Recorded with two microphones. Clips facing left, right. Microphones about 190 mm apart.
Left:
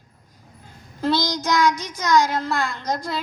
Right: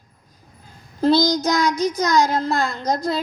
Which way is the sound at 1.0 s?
35° right (ahead or behind).